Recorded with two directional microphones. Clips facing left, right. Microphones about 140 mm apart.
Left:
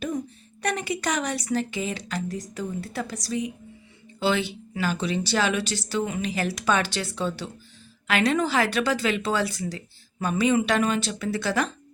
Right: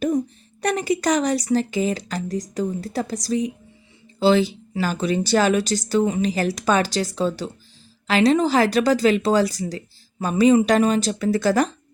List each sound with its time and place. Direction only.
0.6 s a woman's voice: 40° right (ahead or behind)